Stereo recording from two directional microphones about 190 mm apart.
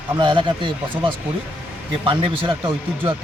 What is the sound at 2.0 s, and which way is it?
Speech, 25° right (ahead or behind).